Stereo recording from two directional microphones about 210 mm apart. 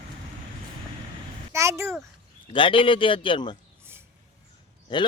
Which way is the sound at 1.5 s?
15° right (ahead or behind).